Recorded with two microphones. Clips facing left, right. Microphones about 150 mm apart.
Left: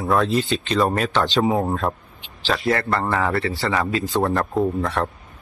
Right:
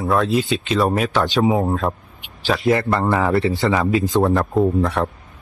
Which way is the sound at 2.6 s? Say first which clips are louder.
Right 5 dB; 15° right (ahead or behind).